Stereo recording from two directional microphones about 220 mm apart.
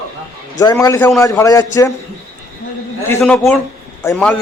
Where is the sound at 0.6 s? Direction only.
15° left (ahead or behind).